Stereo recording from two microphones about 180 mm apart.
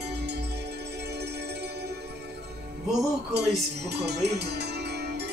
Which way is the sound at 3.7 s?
65° right (ahead or behind).